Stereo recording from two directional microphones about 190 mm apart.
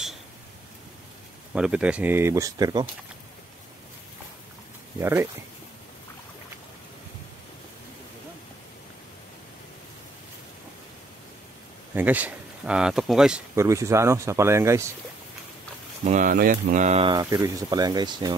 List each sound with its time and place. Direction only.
1.5 s speech: 5° right (ahead or behind)
5.0 s speech: 10° right (ahead or behind)
11.9 s speech: 10° right (ahead or behind)
13.6 s speech: 15° right (ahead or behind)
16.1 s speech: 45° right (ahead or behind)
17.1 s speech: 20° right (ahead or behind)